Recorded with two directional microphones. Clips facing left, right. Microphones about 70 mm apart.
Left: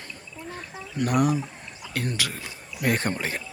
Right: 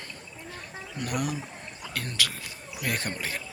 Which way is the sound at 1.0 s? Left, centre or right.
Left.